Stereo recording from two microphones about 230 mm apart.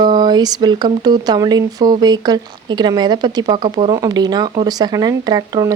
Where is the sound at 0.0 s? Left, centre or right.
Centre.